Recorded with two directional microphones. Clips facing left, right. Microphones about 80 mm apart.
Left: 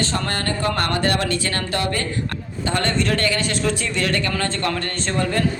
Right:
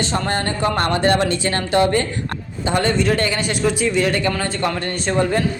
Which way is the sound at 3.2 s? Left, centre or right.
Centre.